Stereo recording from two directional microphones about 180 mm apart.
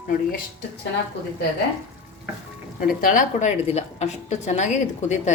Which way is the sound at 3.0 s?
45° left (ahead or behind).